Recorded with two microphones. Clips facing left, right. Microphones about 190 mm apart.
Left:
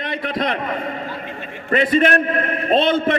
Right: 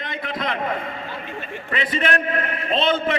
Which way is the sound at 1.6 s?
45° left (ahead or behind).